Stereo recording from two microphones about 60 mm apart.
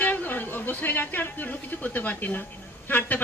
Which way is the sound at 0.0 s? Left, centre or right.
Left.